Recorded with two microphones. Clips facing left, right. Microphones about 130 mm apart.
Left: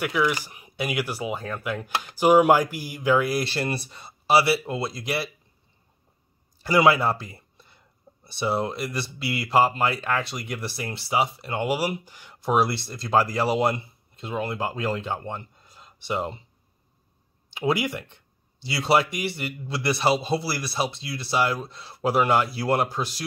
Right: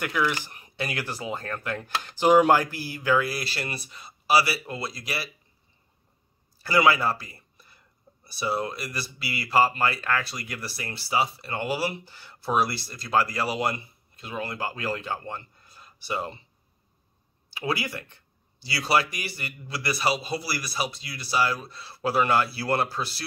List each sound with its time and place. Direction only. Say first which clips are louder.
0.0 s speech: left 3 dB; 10° left (ahead or behind)
3.6 s speech: left 7 dB; 30° left (ahead or behind)
6.6 s speech: left 2 dB; 20° left (ahead or behind)
17.5 s speech: left 5 dB; 20° left (ahead or behind)